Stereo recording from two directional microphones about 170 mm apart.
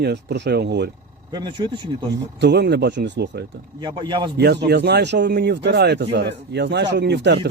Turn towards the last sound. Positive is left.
turn(degrees=-90)